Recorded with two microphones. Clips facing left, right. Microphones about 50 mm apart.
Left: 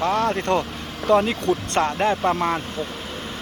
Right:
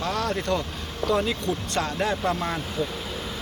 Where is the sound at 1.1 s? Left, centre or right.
Left.